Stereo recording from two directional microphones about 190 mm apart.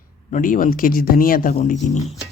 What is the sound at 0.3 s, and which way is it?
Speech, 40° left (ahead or behind).